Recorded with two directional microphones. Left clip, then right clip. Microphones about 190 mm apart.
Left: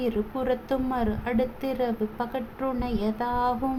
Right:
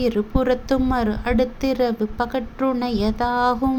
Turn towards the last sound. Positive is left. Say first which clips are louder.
# right 6 dB
turn(degrees=-25)  # may be behind; listen again after turning